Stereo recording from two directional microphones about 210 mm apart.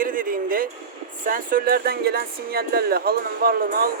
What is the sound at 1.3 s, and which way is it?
Speech, 40° right (ahead or behind).